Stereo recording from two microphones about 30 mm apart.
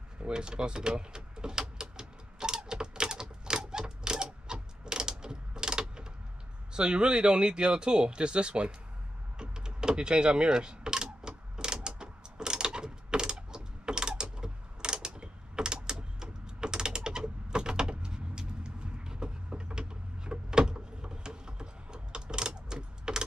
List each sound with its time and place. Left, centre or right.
0.3 s a sound: right
6.7 s speech: right
9.4 s typing: right